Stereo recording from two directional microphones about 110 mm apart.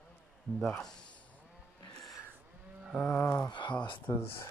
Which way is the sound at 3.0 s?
20° left (ahead or behind).